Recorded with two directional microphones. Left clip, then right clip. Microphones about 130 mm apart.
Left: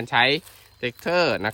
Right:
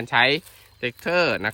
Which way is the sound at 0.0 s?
10° left (ahead or behind).